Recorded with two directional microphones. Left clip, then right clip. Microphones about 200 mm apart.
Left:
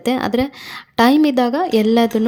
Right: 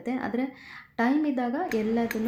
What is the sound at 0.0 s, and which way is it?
A woman's voice, 45° left (ahead or behind).